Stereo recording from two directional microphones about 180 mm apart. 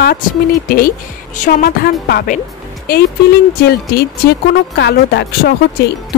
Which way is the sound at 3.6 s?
60° left (ahead or behind).